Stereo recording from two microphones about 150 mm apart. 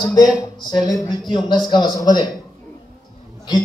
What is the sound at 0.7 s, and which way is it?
A man's voice, 30° left (ahead or behind).